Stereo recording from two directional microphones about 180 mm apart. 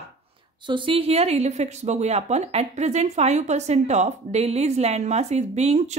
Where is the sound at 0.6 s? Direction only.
25° right (ahead or behind).